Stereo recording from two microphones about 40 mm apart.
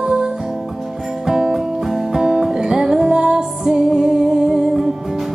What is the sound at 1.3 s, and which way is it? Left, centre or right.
Music, centre.